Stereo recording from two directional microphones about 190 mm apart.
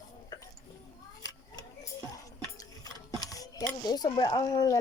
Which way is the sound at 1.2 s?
20° left (ahead or behind).